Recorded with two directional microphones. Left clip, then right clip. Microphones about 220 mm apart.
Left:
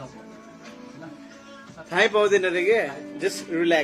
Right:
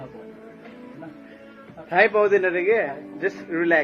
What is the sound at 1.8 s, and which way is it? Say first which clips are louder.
Speech: right 2 dB; 15° left (ahead or behind).